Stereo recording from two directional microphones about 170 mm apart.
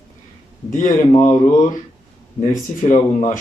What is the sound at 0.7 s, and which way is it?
Speech, 50° left (ahead or behind).